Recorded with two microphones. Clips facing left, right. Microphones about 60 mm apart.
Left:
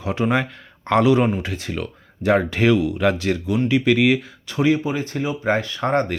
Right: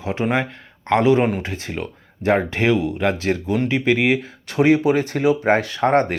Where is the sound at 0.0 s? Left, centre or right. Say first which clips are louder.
Even; right.